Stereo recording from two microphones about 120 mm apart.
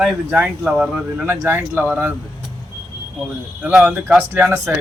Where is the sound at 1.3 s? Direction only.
15° right (ahead or behind).